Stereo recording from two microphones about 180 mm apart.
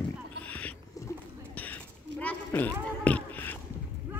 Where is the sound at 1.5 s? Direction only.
10° left (ahead or behind).